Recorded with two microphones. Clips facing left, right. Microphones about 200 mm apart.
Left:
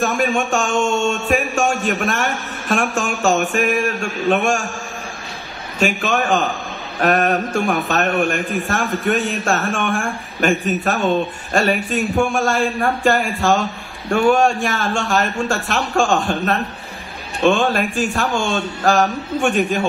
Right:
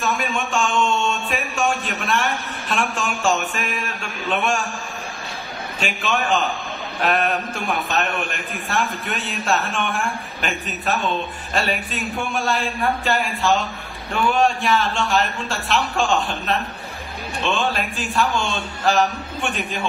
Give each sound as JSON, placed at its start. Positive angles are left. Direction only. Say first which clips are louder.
{"t": 0.0, "sound": "a man's voice", "louder": "left 6 dB", "side_deg": 45}
{"t": 6.0, "sound": "speech", "louder": "left 3 dB", "side_deg": 45}